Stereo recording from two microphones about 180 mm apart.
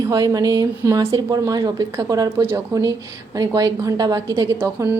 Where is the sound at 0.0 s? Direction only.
20° right (ahead or behind).